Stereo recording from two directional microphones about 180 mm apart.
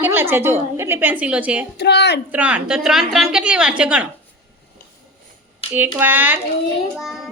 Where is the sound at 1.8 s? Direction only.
70° left (ahead or behind).